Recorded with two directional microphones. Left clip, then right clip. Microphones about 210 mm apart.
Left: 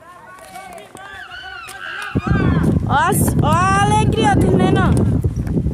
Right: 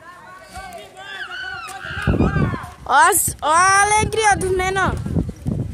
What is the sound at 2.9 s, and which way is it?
Speech, 15° right (ahead or behind).